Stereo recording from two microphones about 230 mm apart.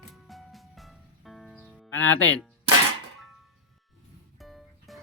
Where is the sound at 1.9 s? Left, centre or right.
Left.